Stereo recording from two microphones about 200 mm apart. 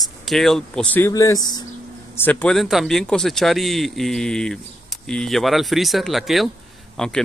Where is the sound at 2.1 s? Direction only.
5° left (ahead or behind).